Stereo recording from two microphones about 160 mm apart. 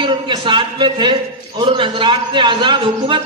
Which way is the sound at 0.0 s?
30° right (ahead or behind).